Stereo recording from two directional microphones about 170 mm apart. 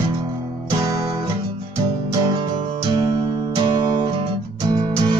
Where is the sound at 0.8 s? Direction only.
20° right (ahead or behind).